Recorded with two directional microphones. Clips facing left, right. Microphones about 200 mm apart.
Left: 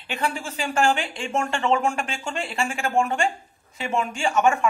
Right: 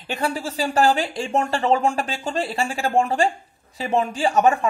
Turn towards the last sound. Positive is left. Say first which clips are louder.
# right 2 dB
turn(degrees=-35)  # may be behind; listen again after turning